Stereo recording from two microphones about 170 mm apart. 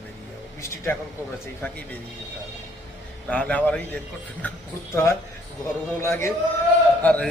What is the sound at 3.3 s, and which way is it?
Speech, 10° left (ahead or behind).